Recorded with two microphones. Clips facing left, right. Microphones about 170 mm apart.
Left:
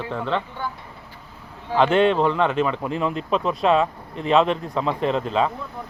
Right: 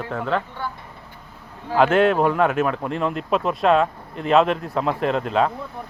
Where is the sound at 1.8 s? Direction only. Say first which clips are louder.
Right 1 dB; 5° right (ahead or behind).